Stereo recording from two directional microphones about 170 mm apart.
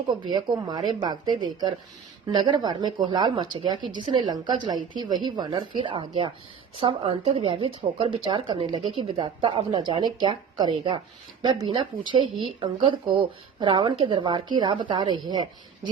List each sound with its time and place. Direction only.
0.1 s speech: 25° right (ahead or behind)